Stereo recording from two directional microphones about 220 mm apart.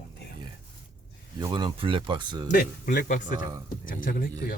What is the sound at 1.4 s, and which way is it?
Speech, 20° right (ahead or behind).